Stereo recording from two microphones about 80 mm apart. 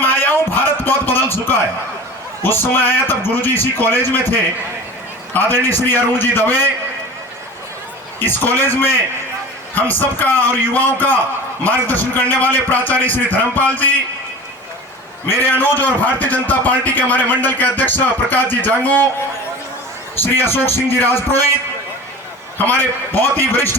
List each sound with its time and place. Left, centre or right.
0.0 s a sound: left
2.4 s speech: left
8.2 s speech: left
15.3 s speech: left
20.1 s speech: left
22.5 s speech: left